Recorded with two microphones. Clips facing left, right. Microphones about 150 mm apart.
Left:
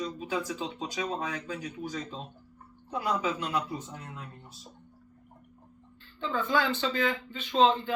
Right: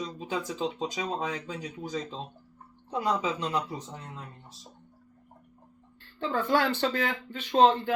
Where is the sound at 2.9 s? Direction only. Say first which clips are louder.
Right 2 dB; 25° right (ahead or behind).